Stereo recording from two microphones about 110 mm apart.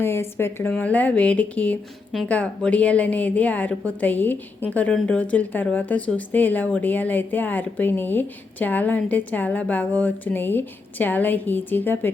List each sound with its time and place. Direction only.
0.0 s speech: 20° left (ahead or behind)